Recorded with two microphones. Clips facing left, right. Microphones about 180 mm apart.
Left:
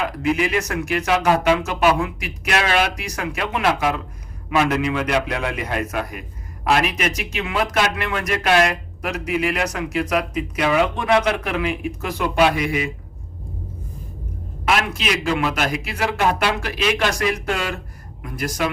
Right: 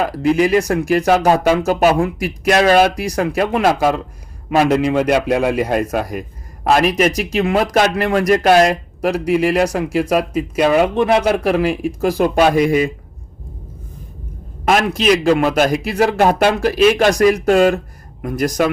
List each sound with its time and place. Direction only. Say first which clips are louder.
0.0 s speech: right 6 dB; 35° right (ahead or behind)
14.7 s speech: right 7 dB; 40° right (ahead or behind)